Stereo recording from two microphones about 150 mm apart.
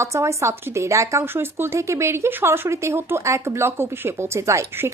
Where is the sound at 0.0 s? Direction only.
20° right (ahead or behind).